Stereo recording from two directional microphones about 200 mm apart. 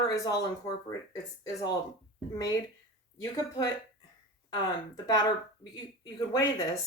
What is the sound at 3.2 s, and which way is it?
Speech, 20° left (ahead or behind).